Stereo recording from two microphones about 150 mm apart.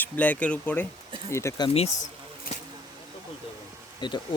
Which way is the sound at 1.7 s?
50° left (ahead or behind).